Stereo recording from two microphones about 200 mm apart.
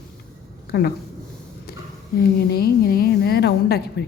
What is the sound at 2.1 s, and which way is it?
A woman's voice, 50° left (ahead or behind).